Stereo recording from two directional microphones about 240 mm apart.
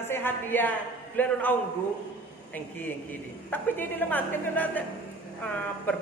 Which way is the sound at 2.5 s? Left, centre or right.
Centre.